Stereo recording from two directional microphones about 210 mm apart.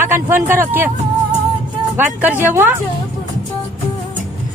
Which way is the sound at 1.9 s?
10° right (ahead or behind).